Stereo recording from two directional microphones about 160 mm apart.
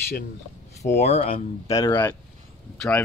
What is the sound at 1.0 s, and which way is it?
Speech, 40° left (ahead or behind).